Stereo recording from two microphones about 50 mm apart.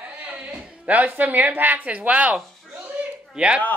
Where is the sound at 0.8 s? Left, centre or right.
Right.